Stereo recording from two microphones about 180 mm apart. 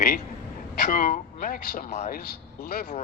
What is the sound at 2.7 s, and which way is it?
Speech, 60° left (ahead or behind).